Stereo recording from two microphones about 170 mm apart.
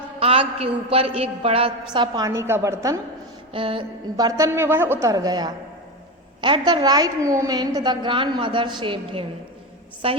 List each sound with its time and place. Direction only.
0.2 s a woman's voice: 35° right (ahead or behind); by 3.0 s 15° right (ahead or behind)
3.5 s a woman's voice: 30° right (ahead or behind)